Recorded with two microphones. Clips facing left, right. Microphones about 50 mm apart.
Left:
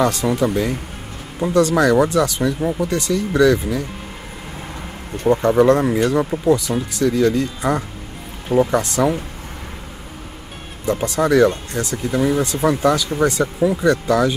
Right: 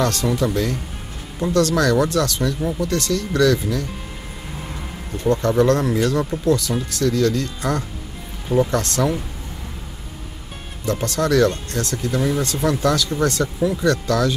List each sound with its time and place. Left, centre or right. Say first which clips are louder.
0.0 s speech: left 3 dB; centre
5.3 s speech: left 3 dB; centre
10.9 s speech: left 3 dB; centre